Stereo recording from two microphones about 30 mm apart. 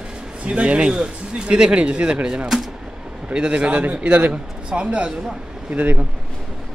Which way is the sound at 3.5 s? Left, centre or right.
Right.